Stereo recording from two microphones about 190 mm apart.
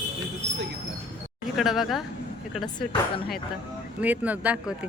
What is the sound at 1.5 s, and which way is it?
Speech, centre (ahead or behind).